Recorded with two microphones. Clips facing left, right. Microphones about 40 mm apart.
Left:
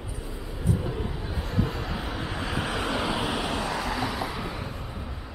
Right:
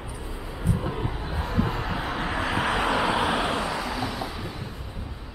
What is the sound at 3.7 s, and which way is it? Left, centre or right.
Vehicle, centre.